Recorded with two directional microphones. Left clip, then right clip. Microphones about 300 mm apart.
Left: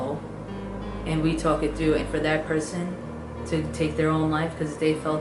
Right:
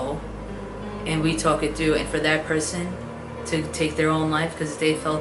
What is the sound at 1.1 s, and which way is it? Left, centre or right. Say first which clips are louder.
Speech: right 2 dB; centre.